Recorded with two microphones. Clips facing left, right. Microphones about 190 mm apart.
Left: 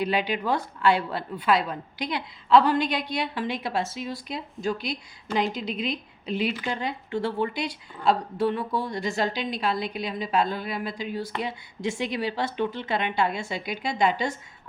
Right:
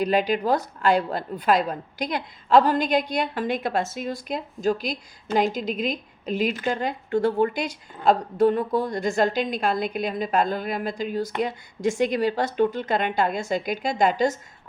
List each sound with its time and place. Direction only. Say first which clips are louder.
0.0 s a woman's voice: right 4 dB; 40° right (ahead or behind)